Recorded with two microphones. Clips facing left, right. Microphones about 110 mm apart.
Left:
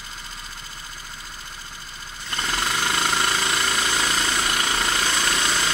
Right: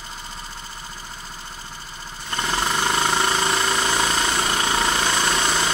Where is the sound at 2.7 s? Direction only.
25° right (ahead or behind).